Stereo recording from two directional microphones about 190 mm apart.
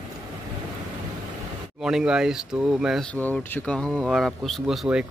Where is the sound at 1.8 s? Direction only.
5° right (ahead or behind).